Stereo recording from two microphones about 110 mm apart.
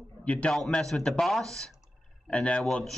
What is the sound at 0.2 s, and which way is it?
A man's voice, 10° left (ahead or behind).